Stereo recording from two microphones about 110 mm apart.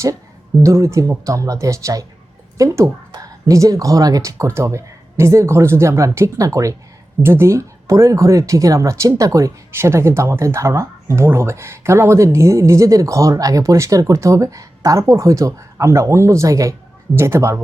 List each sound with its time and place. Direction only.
0.6 s speech: 30° right (ahead or behind)